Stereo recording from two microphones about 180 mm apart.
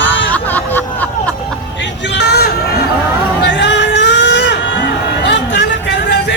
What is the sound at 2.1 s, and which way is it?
Hubbub, 65° left (ahead or behind).